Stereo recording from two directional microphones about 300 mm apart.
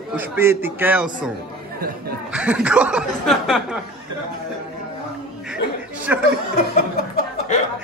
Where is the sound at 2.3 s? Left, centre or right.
Centre.